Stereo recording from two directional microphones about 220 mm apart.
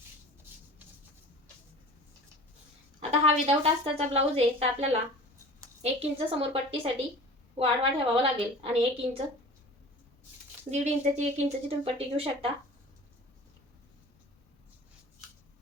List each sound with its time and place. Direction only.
3.0 s a woman's voice: 30° right (ahead or behind)
10.7 s a woman's voice: 30° right (ahead or behind)